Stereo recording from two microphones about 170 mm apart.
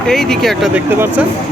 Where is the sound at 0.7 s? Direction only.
10° right (ahead or behind).